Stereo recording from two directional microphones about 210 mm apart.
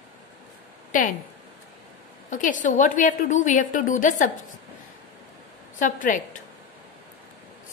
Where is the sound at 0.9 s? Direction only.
40° left (ahead or behind).